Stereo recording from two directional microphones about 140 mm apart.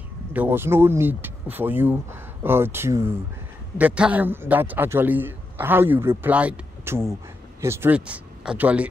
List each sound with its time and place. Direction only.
0.3 s a man's voice: 15° right (ahead or behind)